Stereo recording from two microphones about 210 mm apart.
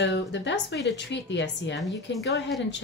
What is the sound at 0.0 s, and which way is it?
A woman's voice, 55° left (ahead or behind).